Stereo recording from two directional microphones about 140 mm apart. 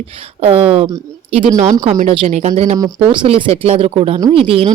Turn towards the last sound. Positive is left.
turn(degrees=-40)  # may be behind; listen again after turning